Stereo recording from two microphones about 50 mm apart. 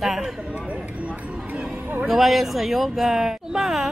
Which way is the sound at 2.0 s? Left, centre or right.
Centre.